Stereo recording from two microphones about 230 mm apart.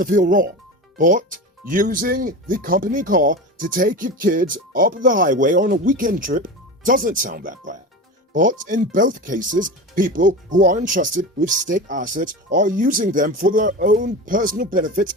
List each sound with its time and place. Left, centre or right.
0.0 s speech: right